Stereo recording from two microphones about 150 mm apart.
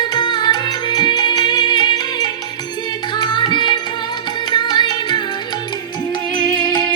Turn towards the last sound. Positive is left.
turn(degrees=30)  # may be behind; listen again after turning